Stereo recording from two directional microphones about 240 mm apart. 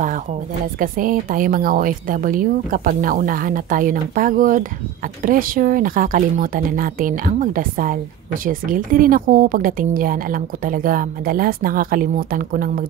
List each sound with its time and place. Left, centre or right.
0.7 s speech: right